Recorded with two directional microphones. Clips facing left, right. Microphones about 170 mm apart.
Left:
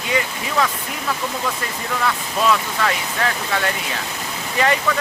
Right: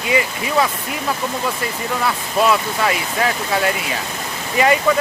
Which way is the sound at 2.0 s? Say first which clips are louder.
Right 2 dB; 10° right (ahead or behind).